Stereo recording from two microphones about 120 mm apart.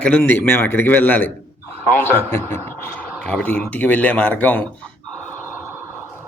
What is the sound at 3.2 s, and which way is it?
Speech, 10° left (ahead or behind).